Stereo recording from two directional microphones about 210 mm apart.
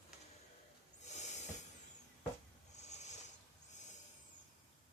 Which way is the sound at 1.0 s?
35° left (ahead or behind).